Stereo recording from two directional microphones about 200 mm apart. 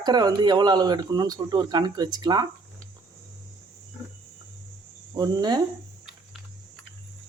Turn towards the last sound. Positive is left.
turn(degrees=-20)  # may be behind; listen again after turning